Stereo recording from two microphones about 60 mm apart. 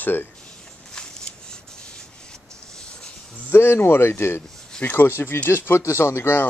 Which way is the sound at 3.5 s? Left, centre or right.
Left.